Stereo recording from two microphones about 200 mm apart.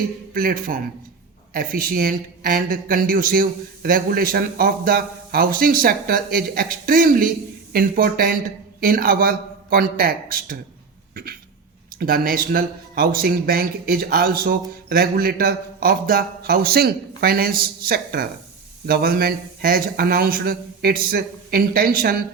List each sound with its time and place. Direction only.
0.3 s speech: 45° right (ahead or behind)
11.1 s cough: 45° right (ahead or behind)
11.9 s speech: 45° right (ahead or behind)